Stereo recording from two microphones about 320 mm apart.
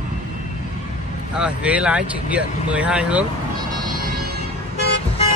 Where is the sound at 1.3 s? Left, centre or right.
Centre.